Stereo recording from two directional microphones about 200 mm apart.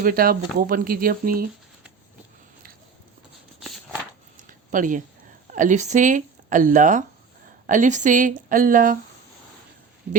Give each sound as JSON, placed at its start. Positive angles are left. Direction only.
{"t": 0.0, "sound": "speech", "side_deg": -45}
{"t": 4.4, "sound": "a sound", "side_deg": -40}
{"t": 5.5, "sound": "speech", "side_deg": -40}